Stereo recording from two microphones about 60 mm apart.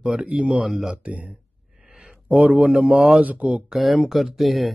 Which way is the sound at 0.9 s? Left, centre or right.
Right.